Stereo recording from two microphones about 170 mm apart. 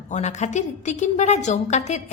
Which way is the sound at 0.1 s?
40° left (ahead or behind).